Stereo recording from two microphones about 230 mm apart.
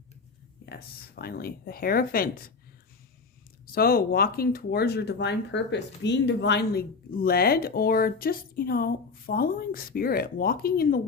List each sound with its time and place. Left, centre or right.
0.6 s speech: left
3.7 s speech: left